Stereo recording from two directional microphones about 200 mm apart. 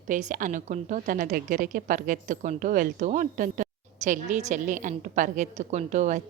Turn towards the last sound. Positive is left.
turn(degrees=-35)  # may be behind; listen again after turning